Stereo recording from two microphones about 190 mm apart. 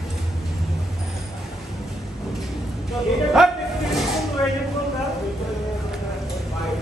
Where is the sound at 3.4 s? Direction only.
Centre (ahead or behind).